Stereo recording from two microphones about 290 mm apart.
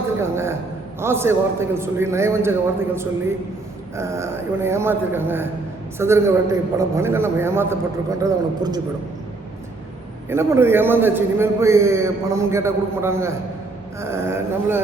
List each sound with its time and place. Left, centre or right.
0.2 s a man's voice: centre
10.2 s a man's voice: centre